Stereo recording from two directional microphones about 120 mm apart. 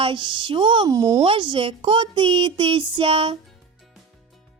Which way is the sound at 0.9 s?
30° right (ahead or behind).